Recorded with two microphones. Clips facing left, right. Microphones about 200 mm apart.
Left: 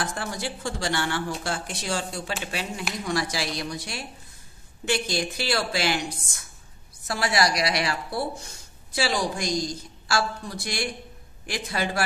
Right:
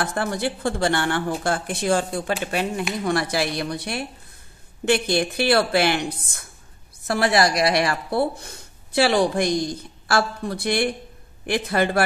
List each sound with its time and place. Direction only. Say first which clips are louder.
0.0 s a woman's voice: right 6 dB; 60° right (ahead or behind)